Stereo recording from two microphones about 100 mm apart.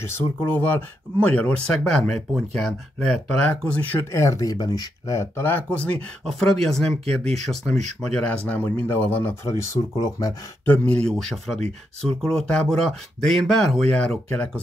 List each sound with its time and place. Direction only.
0.5 s speech: 20° left (ahead or behind)
4.1 s speech: 30° left (ahead or behind)
9.9 s speech: 40° left (ahead or behind)
10.6 s speech: 15° left (ahead or behind)